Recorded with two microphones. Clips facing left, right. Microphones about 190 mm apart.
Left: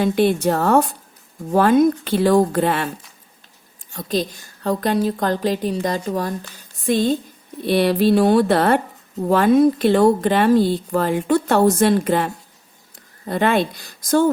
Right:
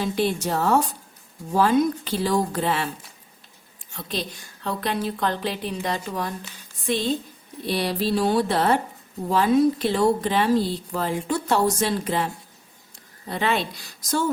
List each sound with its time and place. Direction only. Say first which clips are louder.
0.0 s speech: left 7 dB; 55° left (ahead or behind)
3.9 s a woman's voice: left 8 dB; 40° left (ahead or behind)
7.7 s a woman's voice: left 8 dB; 55° left (ahead or behind)